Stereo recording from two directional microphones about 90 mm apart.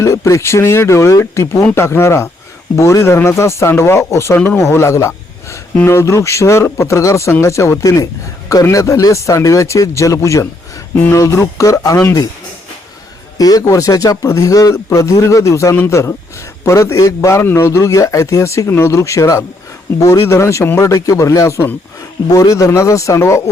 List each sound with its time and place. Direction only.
0.0 s speech: 35° left (ahead or behind)
13.4 s speech: 45° left (ahead or behind)